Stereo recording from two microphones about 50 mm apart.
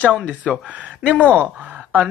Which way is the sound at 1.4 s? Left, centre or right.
Right.